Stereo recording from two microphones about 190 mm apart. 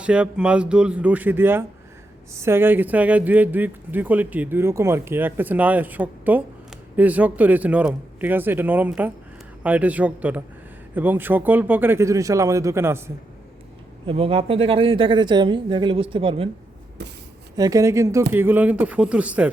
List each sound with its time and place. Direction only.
0.0 s speech: 5° right (ahead or behind)
14.1 s speech: 30° right (ahead or behind)
17.0 s speech: 60° right (ahead or behind)
17.6 s speech: 15° right (ahead or behind)